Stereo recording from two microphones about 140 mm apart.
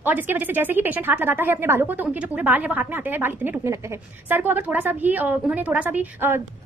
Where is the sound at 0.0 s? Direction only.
10° right (ahead or behind).